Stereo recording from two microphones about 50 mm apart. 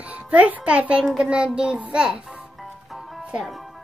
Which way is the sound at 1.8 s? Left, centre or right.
Centre.